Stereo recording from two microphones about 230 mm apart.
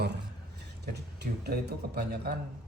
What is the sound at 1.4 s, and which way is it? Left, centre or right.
Speech, right.